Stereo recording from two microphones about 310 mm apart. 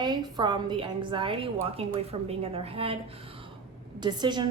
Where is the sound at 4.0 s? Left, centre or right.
Centre.